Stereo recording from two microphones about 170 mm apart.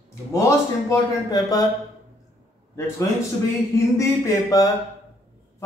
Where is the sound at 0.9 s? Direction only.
20° left (ahead or behind).